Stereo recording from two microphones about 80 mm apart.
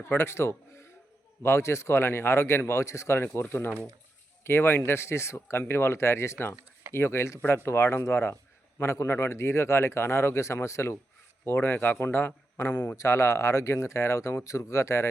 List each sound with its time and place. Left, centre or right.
0.0 s a man's voice: left